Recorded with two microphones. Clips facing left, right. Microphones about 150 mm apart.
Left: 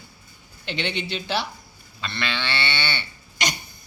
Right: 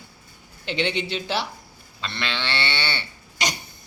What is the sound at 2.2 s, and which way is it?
Speech, 10° left (ahead or behind).